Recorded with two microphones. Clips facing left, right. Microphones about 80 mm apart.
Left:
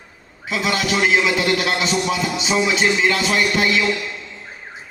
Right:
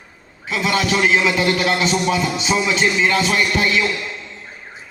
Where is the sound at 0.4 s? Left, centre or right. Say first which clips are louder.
Right 2 dB; right.